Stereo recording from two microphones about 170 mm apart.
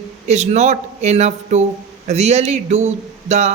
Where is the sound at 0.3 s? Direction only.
45° right (ahead or behind).